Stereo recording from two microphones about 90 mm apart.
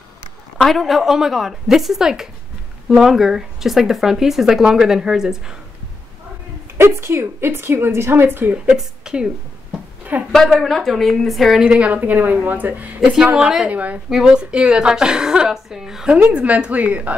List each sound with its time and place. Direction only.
0.6 s speech: centre (ahead or behind)
6.8 s a woman's voice: 30° right (ahead or behind)
8.6 s a sound: 10° right (ahead or behind)
10.6 s speech: centre (ahead or behind)
11.6 s a woman's voice: 15° right (ahead or behind)